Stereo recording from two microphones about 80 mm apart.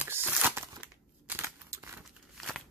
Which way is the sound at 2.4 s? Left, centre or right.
Centre.